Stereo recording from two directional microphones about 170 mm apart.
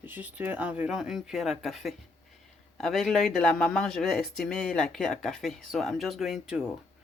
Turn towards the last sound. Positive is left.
turn(degrees=-5)  # may be behind; listen again after turning